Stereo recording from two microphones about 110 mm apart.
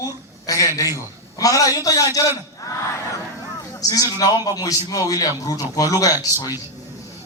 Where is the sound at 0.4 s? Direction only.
30° left (ahead or behind).